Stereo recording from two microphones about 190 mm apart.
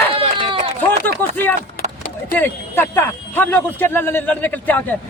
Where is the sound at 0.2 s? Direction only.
30° right (ahead or behind).